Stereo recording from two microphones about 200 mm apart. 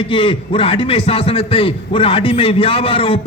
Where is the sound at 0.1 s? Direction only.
25° left (ahead or behind).